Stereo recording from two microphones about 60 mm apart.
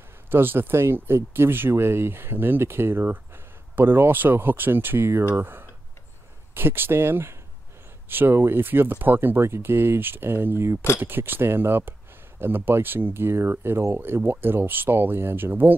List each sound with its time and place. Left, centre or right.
0.3 s speech: right